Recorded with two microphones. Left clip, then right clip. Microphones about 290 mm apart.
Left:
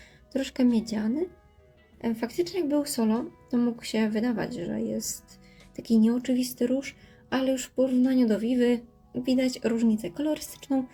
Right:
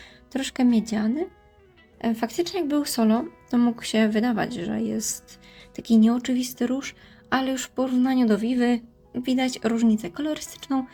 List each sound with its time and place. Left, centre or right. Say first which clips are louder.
0.0 s speech: right 1 dB; right